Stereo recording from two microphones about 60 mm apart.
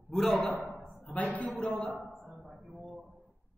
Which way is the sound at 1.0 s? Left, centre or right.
Left.